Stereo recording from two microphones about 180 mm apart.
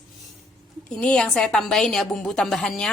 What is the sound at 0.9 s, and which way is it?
A woman's voice, 5° left (ahead or behind).